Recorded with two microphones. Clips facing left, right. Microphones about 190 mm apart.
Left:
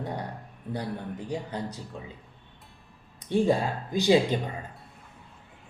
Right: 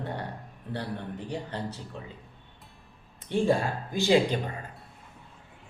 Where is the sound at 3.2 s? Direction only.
15° left (ahead or behind).